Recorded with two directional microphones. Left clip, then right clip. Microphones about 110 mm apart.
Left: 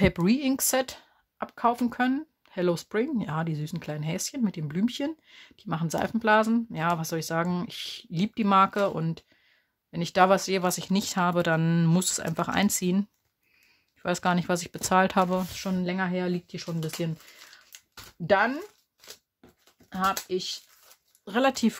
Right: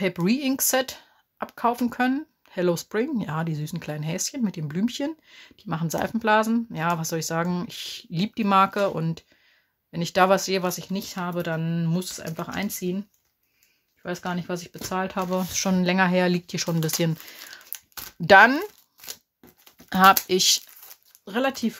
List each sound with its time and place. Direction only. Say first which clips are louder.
0.0 s speech: left 1 dB; 30° left (ahead or behind)
0.3 s speech: right 2 dB; 20° left (ahead or behind)
10.7 s speech: left 2 dB; 50° left (ahead or behind); by 13.0 s 65° left (ahead or behind)
14.0 s speech: left 4 dB; 75° left (ahead or behind)
15.5 s speech: right 8 dB; 25° right (ahead or behind)
18.2 s speech: right 9 dB; 30° right (ahead or behind)
19.9 s speech: right 11 dB; 60° right (ahead or behind)
21.6 s speech: left 2 dB; 65° left (ahead or behind)